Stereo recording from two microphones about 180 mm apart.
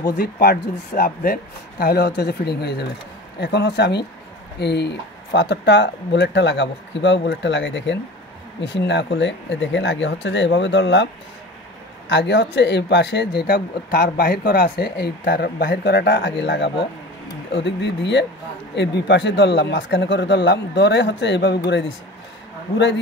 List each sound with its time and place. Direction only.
0.2 s speech: 60° left (ahead or behind); by 11.1 s 80° left
12.1 s speech: 80° left